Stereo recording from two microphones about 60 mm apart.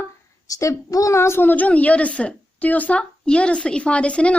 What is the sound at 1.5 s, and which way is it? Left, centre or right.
A woman's voice, left.